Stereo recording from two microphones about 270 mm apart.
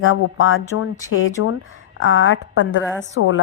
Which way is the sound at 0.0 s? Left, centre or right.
Left.